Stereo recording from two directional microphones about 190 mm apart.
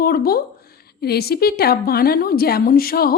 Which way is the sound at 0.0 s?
50° left (ahead or behind).